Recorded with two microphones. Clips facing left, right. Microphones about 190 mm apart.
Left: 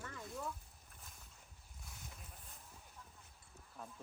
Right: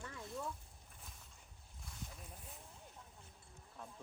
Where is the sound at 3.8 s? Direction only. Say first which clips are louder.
Left 1 dB; centre (ahead or behind).